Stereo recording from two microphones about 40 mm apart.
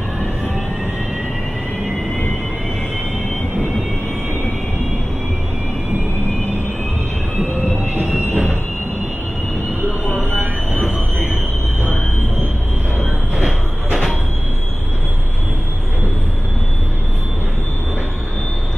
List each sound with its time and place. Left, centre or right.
8.3 s train: right
13.4 s train: centre